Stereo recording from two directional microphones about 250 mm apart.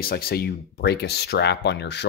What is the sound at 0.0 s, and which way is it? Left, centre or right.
Speech, left.